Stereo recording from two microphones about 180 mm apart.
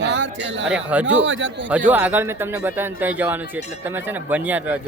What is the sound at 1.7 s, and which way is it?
Speech, 10° right (ahead or behind).